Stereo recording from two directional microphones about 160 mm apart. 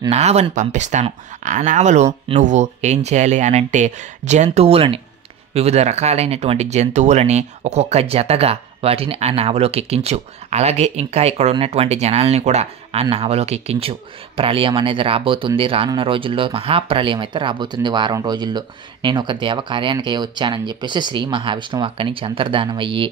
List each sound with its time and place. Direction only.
0.1 s speech: 40° right (ahead or behind)